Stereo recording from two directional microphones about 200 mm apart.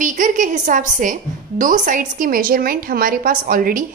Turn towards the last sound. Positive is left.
turn(degrees=-45)  # may be behind; listen again after turning